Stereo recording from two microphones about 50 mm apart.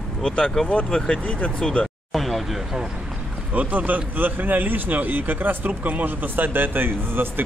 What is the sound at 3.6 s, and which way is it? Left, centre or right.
Speech, right.